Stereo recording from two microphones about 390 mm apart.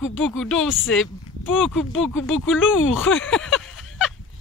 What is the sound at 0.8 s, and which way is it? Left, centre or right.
Speech, left.